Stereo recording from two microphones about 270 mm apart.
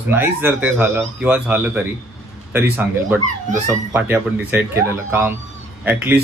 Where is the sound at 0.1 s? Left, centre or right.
Centre.